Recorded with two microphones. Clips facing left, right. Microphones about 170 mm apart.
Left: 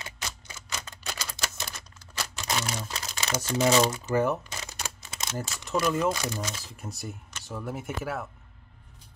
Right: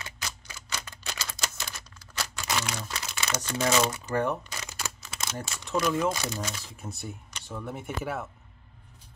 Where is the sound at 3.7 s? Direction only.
30° left (ahead or behind).